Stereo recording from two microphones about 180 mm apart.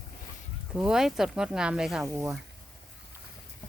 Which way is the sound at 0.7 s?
5° right (ahead or behind).